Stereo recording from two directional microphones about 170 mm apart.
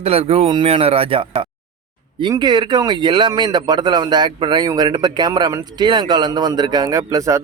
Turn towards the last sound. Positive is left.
turn(degrees=-20)  # may be behind; listen again after turning